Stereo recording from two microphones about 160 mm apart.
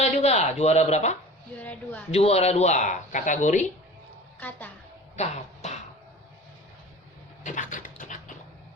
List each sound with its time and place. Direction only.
0.0 s speech: 45° left (ahead or behind)
1.5 s a woman's voice: 10° left (ahead or behind)
2.0 s speech: 40° left (ahead or behind)
4.4 s a woman's voice: 10° left (ahead or behind)
5.1 s speech: 45° left (ahead or behind)
7.4 s a sound: 55° left (ahead or behind)